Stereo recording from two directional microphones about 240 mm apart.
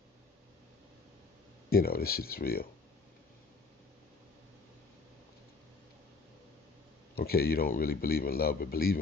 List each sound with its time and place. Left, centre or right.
1.7 s speech: left
7.2 s speech: left